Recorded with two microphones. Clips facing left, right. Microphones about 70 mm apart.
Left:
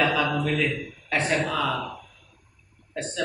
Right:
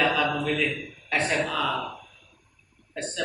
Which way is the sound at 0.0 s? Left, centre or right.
Centre.